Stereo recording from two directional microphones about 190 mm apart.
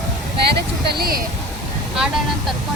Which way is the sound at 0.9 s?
55° right (ahead or behind).